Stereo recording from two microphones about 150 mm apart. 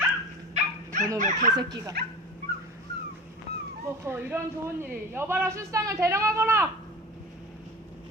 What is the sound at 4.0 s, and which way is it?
Speech, 15° right (ahead or behind).